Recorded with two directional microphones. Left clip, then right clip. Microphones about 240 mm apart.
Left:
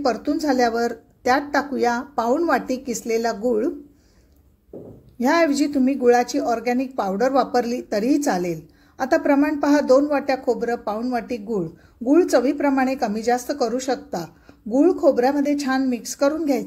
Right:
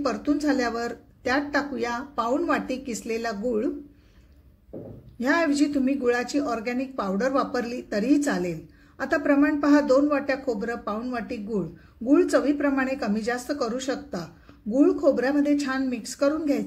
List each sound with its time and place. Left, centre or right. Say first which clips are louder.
0.0 s a woman's voice: left 4 dB; centre
5.2 s a woman's voice: left 4 dB; centre